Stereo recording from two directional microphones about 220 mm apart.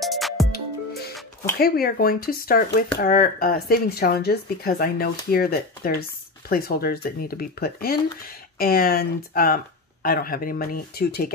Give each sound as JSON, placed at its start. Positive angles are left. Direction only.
{"t": 0.0, "sound": "music", "side_deg": 0}
{"t": 0.5, "sound": "music", "side_deg": 45}
{"t": 1.6, "sound": "speech", "side_deg": 45}